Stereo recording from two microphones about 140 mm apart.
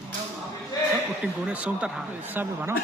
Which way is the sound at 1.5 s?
10° right (ahead or behind).